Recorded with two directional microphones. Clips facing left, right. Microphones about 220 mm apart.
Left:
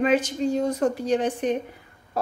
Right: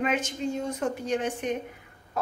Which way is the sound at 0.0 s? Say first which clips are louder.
Left 6 dB; 35° left (ahead or behind).